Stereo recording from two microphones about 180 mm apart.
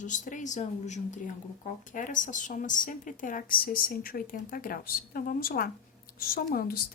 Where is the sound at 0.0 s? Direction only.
45° left (ahead or behind).